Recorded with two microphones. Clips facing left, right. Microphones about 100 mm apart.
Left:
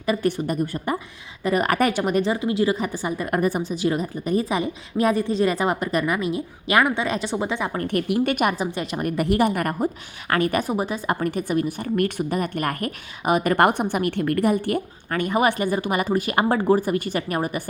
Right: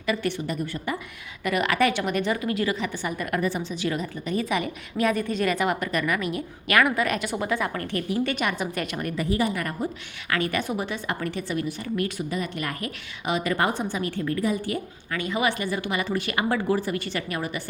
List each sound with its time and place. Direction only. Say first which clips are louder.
0.0 s a woman's voice: left 4 dB; 40° left (ahead or behind)
2.7 s a woman's voice: left 3 dB; 40° left (ahead or behind); by 7.9 s 25° left (ahead or behind)
7.9 s a woman's voice: left 8 dB; 55° left (ahead or behind)
8.5 s a woman's voice: left 3 dB; 30° left (ahead or behind)
9.1 s a woman's voice: left 5 dB; 65° left (ahead or behind); by 17.6 s 45° left (ahead or behind)